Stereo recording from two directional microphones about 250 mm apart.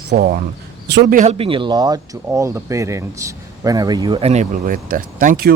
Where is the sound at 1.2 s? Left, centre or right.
Right.